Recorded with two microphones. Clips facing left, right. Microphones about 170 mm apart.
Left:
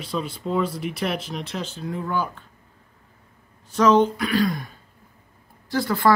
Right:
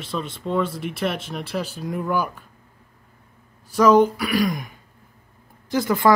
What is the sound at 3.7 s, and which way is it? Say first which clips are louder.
Speech: right 2 dB; 10° right (ahead or behind).